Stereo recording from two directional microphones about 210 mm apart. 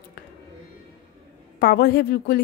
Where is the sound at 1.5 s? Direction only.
50° left (ahead or behind).